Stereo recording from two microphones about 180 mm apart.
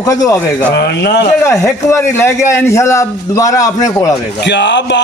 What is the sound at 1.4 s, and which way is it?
A man's voice, 15° left (ahead or behind).